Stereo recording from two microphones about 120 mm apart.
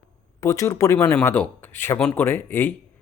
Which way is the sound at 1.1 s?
10° left (ahead or behind).